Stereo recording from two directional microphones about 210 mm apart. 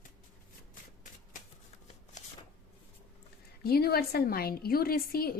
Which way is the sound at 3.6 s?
50° left (ahead or behind).